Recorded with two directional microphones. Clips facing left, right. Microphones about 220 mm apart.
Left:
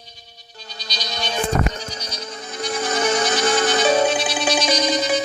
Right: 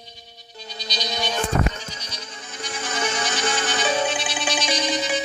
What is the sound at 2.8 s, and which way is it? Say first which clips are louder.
Music: left 6 dB; 40° left (ahead or behind).